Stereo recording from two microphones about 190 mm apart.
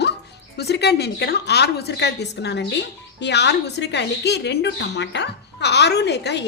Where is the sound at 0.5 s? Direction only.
60° left (ahead or behind).